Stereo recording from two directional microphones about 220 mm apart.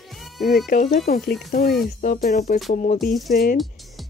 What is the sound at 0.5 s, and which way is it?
Speech, 40° left (ahead or behind).